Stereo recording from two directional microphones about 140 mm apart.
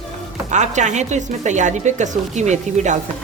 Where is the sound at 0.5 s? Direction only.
60° right (ahead or behind).